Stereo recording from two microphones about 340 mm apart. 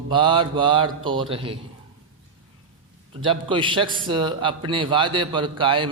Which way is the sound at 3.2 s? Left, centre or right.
Centre.